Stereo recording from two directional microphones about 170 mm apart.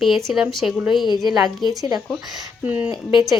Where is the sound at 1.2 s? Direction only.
25° right (ahead or behind).